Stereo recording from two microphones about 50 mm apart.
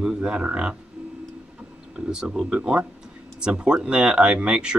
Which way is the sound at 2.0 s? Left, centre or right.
Centre.